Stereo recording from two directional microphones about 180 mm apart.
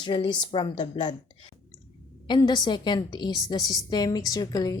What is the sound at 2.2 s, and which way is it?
A woman's voice, 25° left (ahead or behind).